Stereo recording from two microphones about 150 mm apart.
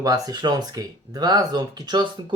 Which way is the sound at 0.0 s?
25° right (ahead or behind).